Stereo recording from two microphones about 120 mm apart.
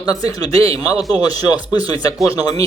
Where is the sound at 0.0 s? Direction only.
30° left (ahead or behind).